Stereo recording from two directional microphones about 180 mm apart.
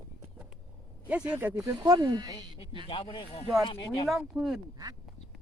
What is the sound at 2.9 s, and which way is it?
Speech, 30° left (ahead or behind).